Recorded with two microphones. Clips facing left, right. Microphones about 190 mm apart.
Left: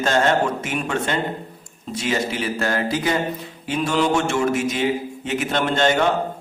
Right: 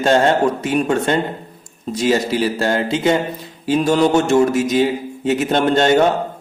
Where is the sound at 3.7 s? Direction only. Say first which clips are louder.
Right 6 dB; 40° right (ahead or behind).